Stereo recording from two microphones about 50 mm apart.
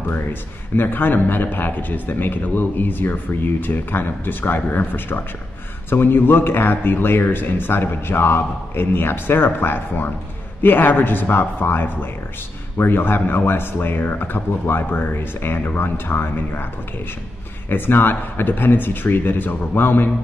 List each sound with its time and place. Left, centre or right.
0.1 s a man's voice: left
17.6 s speech: left